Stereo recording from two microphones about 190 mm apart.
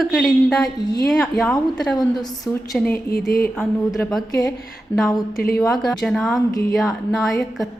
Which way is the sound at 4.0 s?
5° left (ahead or behind).